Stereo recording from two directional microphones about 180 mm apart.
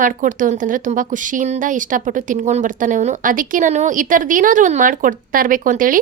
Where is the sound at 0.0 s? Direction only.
45° right (ahead or behind).